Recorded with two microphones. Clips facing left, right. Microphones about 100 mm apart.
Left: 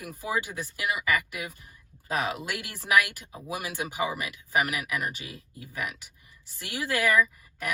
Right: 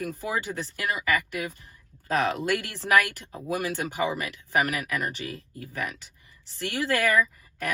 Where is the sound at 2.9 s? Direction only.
50° right (ahead or behind).